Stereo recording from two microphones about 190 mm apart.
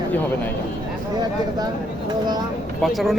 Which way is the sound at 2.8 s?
Centre (ahead or behind).